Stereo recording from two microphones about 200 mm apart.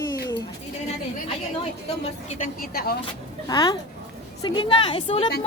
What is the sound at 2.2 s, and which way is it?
Speech, 45° left (ahead or behind).